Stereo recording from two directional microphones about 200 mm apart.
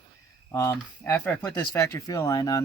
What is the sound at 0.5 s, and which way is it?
Speech, 15° left (ahead or behind).